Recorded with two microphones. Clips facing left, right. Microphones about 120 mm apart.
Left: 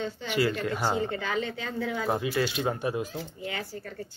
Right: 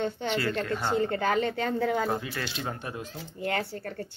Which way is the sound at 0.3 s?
10° left (ahead or behind).